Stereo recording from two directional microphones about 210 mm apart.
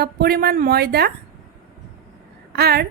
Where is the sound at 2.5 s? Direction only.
50° right (ahead or behind).